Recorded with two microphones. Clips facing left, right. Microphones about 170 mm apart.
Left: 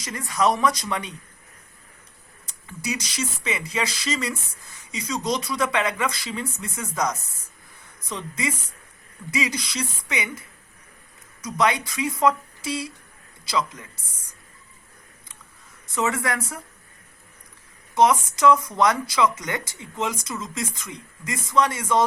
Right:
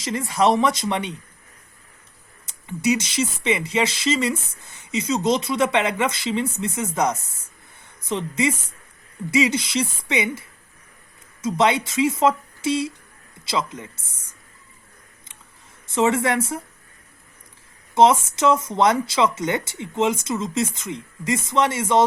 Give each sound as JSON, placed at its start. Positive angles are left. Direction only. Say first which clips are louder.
{"t": 0.0, "sound": "speech", "louder": "right 3 dB", "side_deg": -25}
{"t": 2.6, "sound": "a man's voice", "louder": "right 9 dB", "side_deg": -25}
{"t": 15.9, "sound": "speech", "louder": "right 6 dB", "side_deg": -25}
{"t": 17.9, "sound": "speech", "louder": "right 3 dB", "side_deg": -25}